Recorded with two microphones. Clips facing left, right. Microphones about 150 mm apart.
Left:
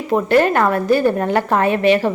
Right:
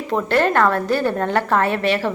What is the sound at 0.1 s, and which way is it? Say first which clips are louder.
A woman's voice: left 4 dB; 15° left (ahead or behind).